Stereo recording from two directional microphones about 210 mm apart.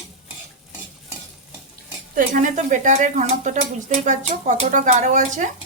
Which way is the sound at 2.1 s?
40° right (ahead or behind).